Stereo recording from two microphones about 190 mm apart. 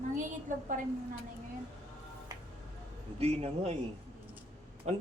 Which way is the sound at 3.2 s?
35° right (ahead or behind).